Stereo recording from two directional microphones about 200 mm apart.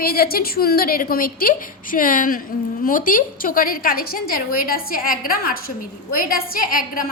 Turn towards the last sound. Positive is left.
turn(degrees=45)  # may be behind; listen again after turning